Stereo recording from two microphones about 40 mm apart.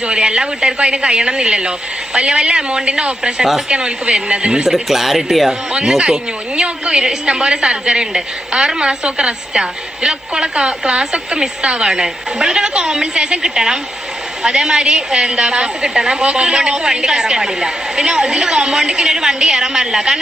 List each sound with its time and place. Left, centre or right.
0.0 s a woman's voice: right
4.6 s speech: centre
6.6 s a woman's voice: right